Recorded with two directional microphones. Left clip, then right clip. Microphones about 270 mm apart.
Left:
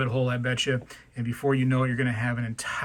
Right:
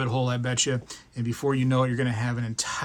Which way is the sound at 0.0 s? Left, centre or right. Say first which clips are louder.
Left 1 dB; centre.